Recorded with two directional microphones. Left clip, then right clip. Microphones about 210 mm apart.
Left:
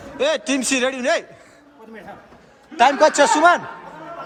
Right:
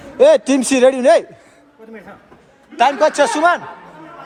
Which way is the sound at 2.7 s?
15° left (ahead or behind).